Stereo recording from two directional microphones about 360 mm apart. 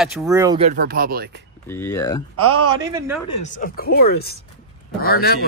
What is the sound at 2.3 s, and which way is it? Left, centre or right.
Speech, centre.